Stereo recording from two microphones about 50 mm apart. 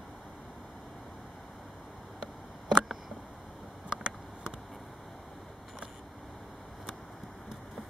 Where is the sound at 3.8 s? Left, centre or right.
Centre.